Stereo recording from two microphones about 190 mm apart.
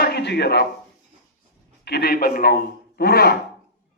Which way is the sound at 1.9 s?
55° left (ahead or behind).